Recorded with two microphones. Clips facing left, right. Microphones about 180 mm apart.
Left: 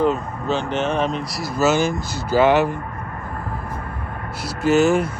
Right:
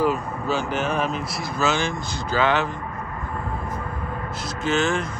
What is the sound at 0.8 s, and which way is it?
Speech, 30° left (ahead or behind).